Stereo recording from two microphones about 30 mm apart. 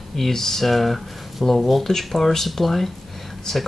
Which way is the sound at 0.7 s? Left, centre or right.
Centre.